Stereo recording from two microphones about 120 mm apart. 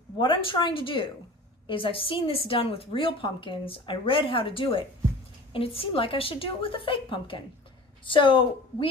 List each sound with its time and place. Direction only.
0.2 s a woman's voice: 45° left (ahead or behind)